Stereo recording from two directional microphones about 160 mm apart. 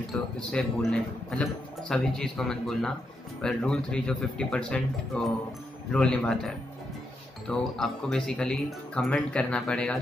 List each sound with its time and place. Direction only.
0.1 s speech: 5° left (ahead or behind)